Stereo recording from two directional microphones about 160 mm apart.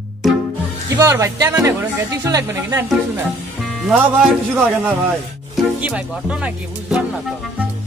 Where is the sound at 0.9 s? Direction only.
20° right (ahead or behind).